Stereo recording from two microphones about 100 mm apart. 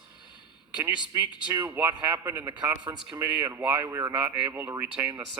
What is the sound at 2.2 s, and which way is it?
Speech, 25° right (ahead or behind).